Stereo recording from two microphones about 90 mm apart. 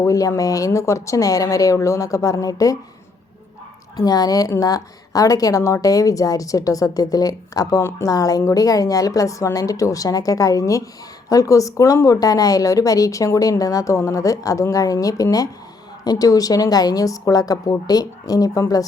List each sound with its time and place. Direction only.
0.0 s a woman's voice: 40° left (ahead or behind)
3.9 s a woman's voice: 45° left (ahead or behind)
7.8 s a woman's voice: 30° left (ahead or behind)
8.0 s a woman's voice: 40° left (ahead or behind)